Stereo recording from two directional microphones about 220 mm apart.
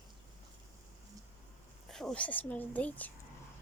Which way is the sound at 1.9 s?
Centre (ahead or behind).